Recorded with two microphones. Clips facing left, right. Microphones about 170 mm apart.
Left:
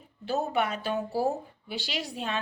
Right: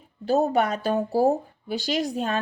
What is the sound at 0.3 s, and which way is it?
A woman's voice, 40° right (ahead or behind).